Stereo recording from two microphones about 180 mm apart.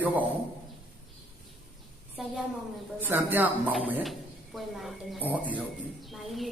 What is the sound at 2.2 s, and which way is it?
A woman's voice, centre (ahead or behind).